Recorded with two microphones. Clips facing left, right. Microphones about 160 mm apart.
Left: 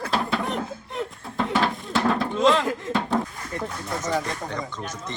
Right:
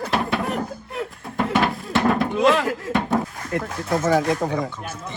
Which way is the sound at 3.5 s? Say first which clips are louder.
Right 7 dB; 90° right.